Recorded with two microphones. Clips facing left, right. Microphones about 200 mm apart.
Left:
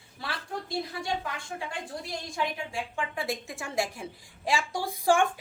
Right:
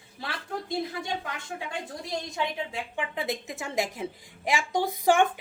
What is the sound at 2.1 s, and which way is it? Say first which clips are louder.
A woman's voice: right 2 dB; 20° right (ahead or behind).